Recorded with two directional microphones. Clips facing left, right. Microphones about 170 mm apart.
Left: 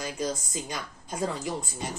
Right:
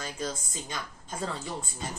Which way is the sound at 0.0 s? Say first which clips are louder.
Left 4 dB; 15° left (ahead or behind).